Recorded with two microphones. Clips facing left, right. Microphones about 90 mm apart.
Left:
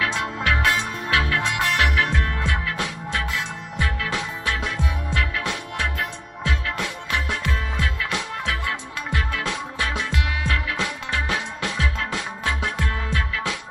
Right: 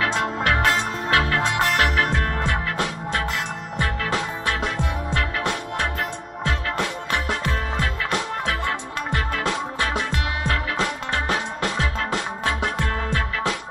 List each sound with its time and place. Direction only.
0.0 s music: 45° right (ahead or behind)
0.7 s music: 30° right (ahead or behind)